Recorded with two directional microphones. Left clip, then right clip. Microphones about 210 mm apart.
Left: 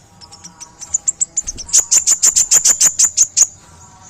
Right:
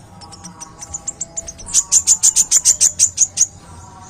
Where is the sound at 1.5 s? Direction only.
30° left (ahead or behind).